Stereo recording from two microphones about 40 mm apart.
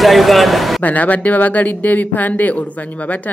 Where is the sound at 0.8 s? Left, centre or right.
Left.